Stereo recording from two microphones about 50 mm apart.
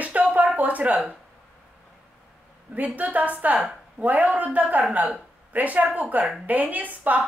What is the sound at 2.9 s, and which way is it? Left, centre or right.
A woman's voice, right.